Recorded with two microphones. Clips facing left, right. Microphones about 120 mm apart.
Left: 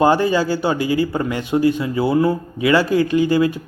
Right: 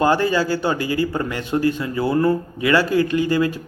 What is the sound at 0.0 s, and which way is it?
A man's voice, 20° left (ahead or behind).